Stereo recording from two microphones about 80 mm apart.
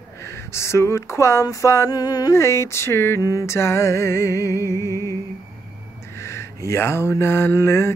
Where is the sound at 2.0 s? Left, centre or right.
Left.